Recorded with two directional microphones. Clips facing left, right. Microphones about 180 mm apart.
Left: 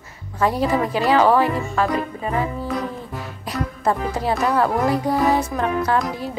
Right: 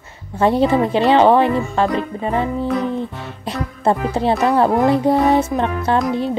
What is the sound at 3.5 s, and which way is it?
Music, 25° right (ahead or behind).